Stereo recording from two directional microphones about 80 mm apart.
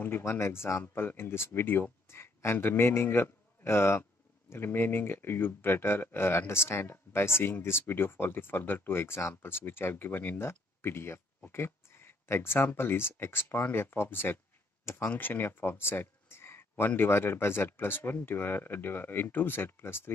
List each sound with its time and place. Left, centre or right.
0.0 s speech: left